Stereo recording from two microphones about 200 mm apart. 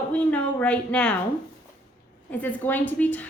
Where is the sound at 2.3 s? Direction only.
10° left (ahead or behind).